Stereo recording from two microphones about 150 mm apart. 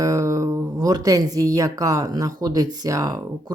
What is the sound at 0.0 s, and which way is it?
Speech, 20° right (ahead or behind).